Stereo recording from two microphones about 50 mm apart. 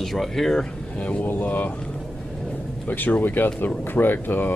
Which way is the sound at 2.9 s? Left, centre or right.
Left.